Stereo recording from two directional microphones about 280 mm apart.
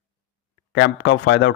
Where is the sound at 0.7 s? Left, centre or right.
Left.